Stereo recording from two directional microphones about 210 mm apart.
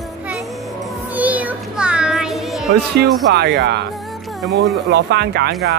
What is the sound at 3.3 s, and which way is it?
Speech, 50° right (ahead or behind).